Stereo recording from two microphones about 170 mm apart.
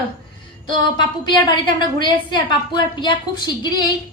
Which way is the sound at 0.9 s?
25° left (ahead or behind).